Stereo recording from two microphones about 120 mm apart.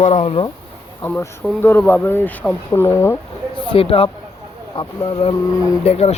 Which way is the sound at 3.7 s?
50° left (ahead or behind).